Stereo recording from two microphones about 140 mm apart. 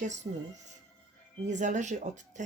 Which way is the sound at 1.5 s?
60° right (ahead or behind).